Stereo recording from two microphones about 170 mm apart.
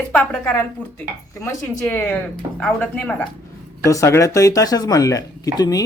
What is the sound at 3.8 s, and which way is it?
Speech, 15° left (ahead or behind).